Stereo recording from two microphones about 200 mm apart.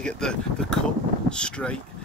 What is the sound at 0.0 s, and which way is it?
Speech, 5° left (ahead or behind).